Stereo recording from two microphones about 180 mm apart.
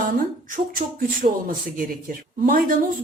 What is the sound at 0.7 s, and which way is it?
Speech, 50° right (ahead or behind).